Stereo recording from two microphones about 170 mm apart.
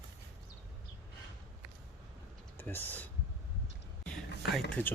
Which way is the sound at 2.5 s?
10° left (ahead or behind).